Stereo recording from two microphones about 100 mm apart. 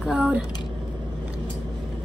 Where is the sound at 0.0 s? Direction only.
15° right (ahead or behind).